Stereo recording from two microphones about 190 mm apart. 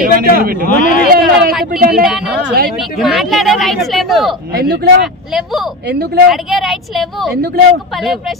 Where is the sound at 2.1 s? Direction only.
5° right (ahead or behind).